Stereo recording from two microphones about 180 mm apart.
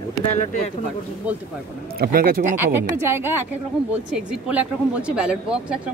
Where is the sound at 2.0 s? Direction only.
55° right (ahead or behind).